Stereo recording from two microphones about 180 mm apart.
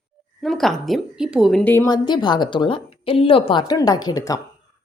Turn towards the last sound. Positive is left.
turn(degrees=20)  # may be behind; listen again after turning